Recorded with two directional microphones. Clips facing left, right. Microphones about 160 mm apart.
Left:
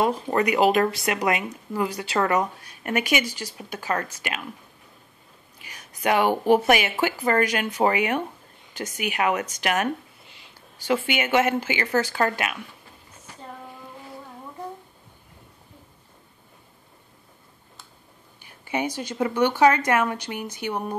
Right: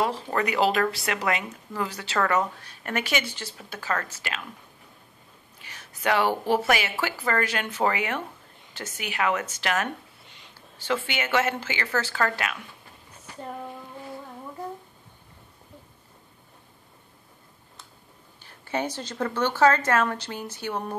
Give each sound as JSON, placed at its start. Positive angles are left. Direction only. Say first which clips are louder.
{"t": 0.3, "sound": "speech", "louder": "left 5 dB", "side_deg": 15}
{"t": 5.6, "sound": "speech", "louder": "left 3 dB", "side_deg": 15}
{"t": 9.8, "sound": "speech", "louder": "left 7 dB", "side_deg": 5}
{"t": 18.4, "sound": "speech", "louder": "left 2 dB", "side_deg": 15}